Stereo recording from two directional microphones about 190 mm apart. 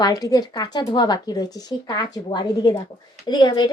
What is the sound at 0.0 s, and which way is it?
Speech, 20° left (ahead or behind).